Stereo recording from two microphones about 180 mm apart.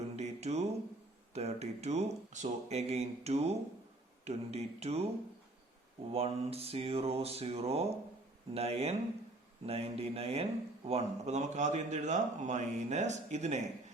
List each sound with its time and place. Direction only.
0.2 s a sound: 40° right (ahead or behind)
1.3 s speech: 35° right (ahead or behind)
6.1 s speech: 35° right (ahead or behind)